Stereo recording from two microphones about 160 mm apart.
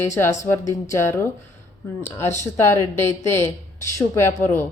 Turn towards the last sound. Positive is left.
turn(degrees=15)  # may be behind; listen again after turning